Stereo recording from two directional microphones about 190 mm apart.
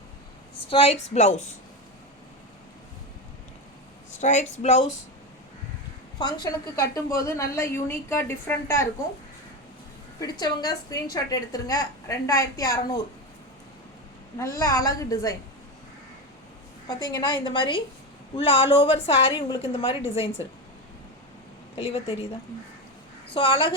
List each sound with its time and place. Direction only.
0.7 s a woman's voice: 30° left (ahead or behind)
4.2 s a woman's voice: 40° left (ahead or behind)
6.1 s a woman's voice: 25° left (ahead or behind)
10.2 s a woman's voice: 20° left (ahead or behind)
14.3 s a woman's voice: 15° left (ahead or behind)
17.0 s a woman's voice: 20° left (ahead or behind)
21.8 s a woman's voice: 30° left (ahead or behind)
23.3 s a woman's voice: 30° left (ahead or behind)